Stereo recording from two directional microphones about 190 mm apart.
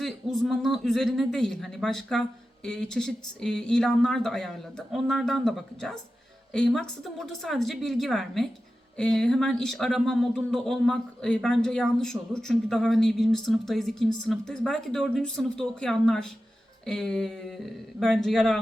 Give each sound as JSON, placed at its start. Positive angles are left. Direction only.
{"t": 0.0, "sound": "speech", "side_deg": 0}